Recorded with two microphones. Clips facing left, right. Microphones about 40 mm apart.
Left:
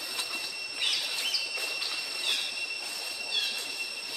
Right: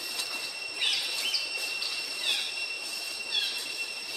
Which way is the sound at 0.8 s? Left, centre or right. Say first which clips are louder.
Right 1 dB; centre.